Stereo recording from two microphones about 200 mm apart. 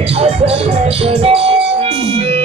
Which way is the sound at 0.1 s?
30° right (ahead or behind).